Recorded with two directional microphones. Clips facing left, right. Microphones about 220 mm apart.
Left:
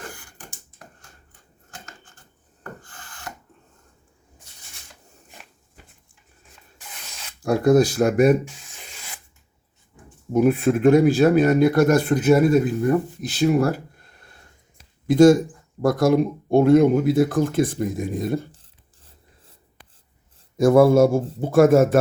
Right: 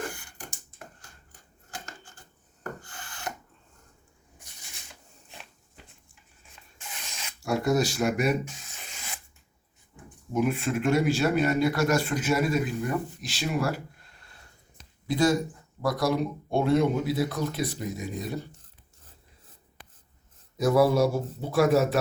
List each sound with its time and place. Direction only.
7.6 s speech: 50° left (ahead or behind)
10.3 s speech: 50° left (ahead or behind)
20.6 s speech: 50° left (ahead or behind)